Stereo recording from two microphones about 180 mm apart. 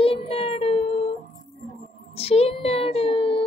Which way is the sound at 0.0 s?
30° left (ahead or behind).